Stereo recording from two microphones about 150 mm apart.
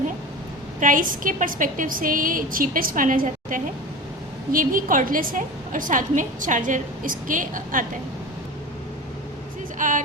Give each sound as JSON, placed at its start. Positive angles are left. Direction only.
{"t": 0.8, "sound": "a woman's voice", "side_deg": -60}
{"t": 9.7, "sound": "speech", "side_deg": -60}